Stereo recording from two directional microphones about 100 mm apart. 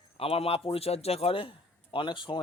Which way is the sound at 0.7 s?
85° left.